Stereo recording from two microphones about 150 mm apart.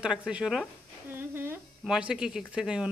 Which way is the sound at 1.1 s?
15° right (ahead or behind).